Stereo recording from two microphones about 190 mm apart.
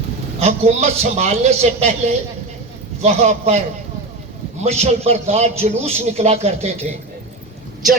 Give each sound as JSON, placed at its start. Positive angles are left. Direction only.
{"t": 0.3, "sound": "a man's voice", "side_deg": -35}
{"t": 4.6, "sound": "a man's voice", "side_deg": -35}